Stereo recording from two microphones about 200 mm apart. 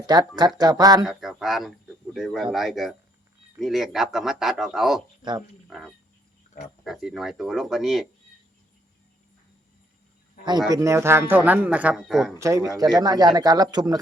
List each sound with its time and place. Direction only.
0.0 s speech: 20° right (ahead or behind)
1.0 s speech: centre (ahead or behind)
5.6 s frog: centre (ahead or behind)
6.8 s speech: centre (ahead or behind)
10.7 s speech: 15° right (ahead or behind)
12.4 s speech: 15° right (ahead or behind)